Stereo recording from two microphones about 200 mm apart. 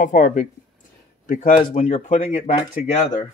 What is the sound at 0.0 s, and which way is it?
Speech, 40° left (ahead or behind).